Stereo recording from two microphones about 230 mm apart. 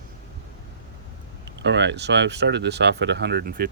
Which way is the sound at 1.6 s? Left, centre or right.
Right.